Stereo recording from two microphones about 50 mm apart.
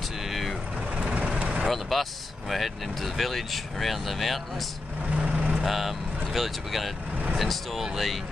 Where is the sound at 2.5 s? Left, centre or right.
Centre.